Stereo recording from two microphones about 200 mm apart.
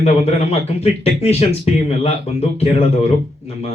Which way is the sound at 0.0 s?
30° left (ahead or behind).